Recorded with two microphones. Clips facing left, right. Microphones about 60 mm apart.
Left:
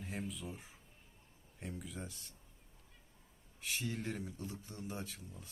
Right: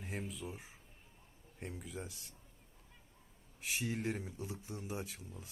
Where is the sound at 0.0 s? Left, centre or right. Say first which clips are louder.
Even; centre.